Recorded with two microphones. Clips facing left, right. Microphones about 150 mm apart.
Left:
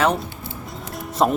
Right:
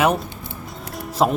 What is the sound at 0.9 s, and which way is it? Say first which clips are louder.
Music: even; centre (ahead or behind).